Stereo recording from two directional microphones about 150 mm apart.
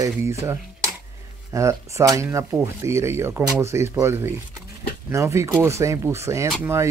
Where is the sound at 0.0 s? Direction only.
20° right (ahead or behind).